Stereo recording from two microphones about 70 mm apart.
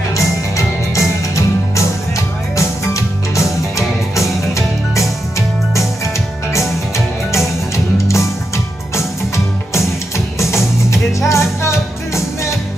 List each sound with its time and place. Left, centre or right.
0.1 s music: left
7.3 s music: left
10.5 s music: left